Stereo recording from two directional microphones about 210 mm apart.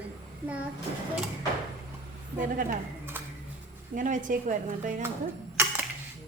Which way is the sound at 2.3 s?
40° right (ahead or behind).